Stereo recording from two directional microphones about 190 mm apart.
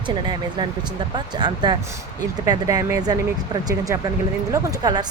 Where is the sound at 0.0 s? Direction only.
25° right (ahead or behind).